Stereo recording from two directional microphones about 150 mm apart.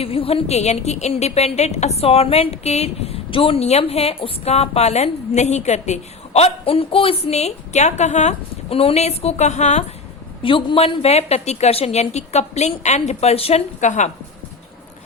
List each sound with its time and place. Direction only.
0.0 s a woman's voice: 40° left (ahead or behind)
10.4 s a woman's voice: 35° left (ahead or behind); by 14.1 s 55° left (ahead or behind)